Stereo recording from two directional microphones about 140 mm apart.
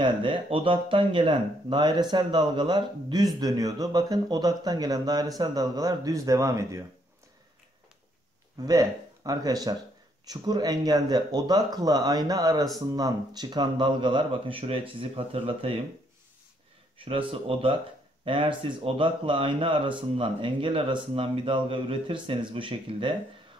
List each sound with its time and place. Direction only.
0.0 s speech: 40° right (ahead or behind); by 6.8 s 20° right (ahead or behind)
8.6 s speech: 25° right (ahead or behind); by 15.8 s 40° right (ahead or behind)
17.0 s speech: 40° right (ahead or behind)